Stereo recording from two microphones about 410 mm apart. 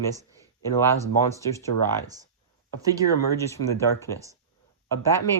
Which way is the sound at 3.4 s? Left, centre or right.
Centre.